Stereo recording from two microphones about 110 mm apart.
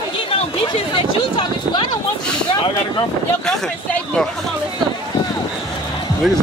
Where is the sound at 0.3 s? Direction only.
55° left (ahead or behind).